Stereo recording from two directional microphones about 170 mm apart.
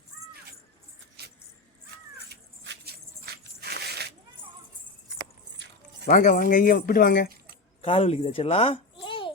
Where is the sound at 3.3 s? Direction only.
70° right (ahead or behind).